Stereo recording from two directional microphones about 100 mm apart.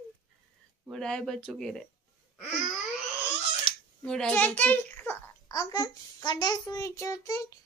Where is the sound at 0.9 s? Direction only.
5° left (ahead or behind).